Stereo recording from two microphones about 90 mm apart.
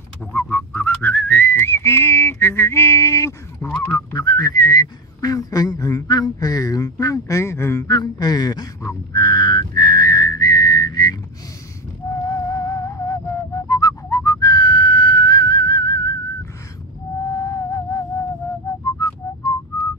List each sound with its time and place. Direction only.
0.3 s whistling: 20° left (ahead or behind)
7.9 s a sound: 50° left (ahead or behind)
9.1 s whistling: 45° left (ahead or behind)
12.1 s music: 35° left (ahead or behind)
17.3 s music: 40° left (ahead or behind)